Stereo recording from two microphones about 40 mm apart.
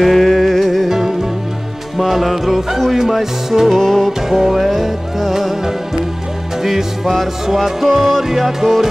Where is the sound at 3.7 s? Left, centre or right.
Centre.